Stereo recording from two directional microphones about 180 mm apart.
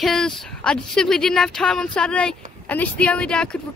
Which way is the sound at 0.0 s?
Centre (ahead or behind).